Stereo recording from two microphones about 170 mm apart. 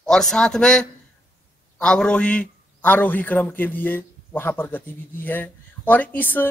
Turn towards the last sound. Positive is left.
turn(degrees=10)  # may be behind; listen again after turning